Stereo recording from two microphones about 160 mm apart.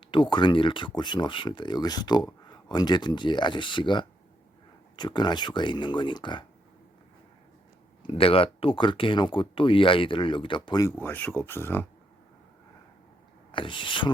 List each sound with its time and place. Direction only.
0.1 s speech: 30° left (ahead or behind)
8.0 s speech: 35° left (ahead or behind)
10.9 s speech: 10° left (ahead or behind)
13.5 s speech: 30° left (ahead or behind)